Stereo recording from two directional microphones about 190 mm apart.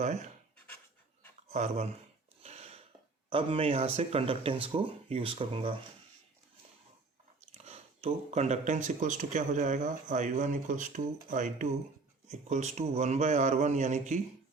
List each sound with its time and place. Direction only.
1.5 s speech: 35° right (ahead or behind)
2.4 s a sound: 35° right (ahead or behind)
3.2 s speech: 30° right (ahead or behind)
7.5 s speech: 35° right (ahead or behind)